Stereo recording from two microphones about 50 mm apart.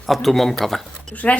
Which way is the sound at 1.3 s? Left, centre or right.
Left.